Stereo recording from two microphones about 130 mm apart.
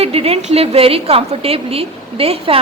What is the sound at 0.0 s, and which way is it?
A woman's voice, 50° right (ahead or behind).